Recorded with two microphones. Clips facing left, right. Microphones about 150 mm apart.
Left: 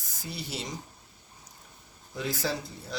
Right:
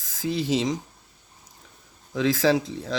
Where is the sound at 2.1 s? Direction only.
90° right.